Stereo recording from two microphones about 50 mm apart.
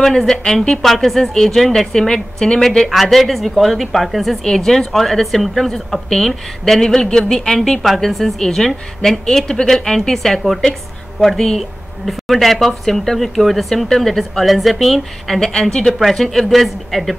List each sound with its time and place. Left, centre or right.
0.0 s a woman's voice: centre
2.9 s a woman's voice: centre